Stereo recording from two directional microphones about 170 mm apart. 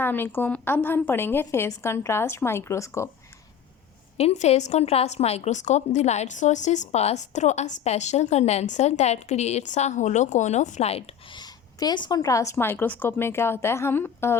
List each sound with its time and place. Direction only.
0.0 s a woman's voice: 10° left (ahead or behind)
4.2 s a woman's voice: 40° left (ahead or behind); by 14.3 s 15° left (ahead or behind)